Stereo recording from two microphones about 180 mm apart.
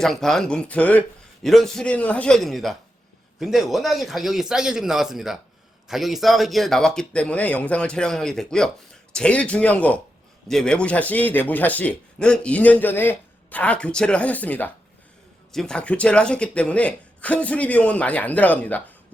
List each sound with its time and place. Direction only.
0.0 s a man's voice: centre (ahead or behind)